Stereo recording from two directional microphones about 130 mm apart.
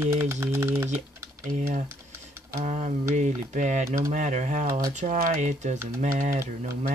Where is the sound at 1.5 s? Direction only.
65° right (ahead or behind).